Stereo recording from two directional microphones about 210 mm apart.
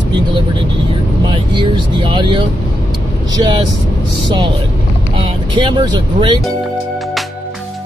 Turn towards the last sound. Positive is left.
turn(degrees=-20)  # may be behind; listen again after turning